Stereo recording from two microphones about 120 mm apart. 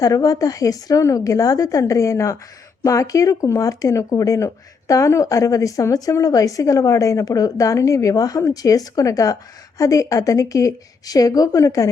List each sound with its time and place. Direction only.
0.0 s speech: 30° left (ahead or behind)